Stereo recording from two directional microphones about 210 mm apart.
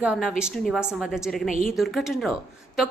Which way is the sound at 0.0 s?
5° right (ahead or behind).